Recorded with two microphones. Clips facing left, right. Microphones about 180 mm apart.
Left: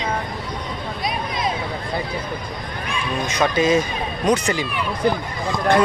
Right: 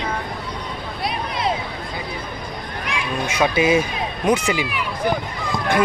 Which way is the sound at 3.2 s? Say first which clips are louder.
Right 1 dB; 10° right (ahead or behind).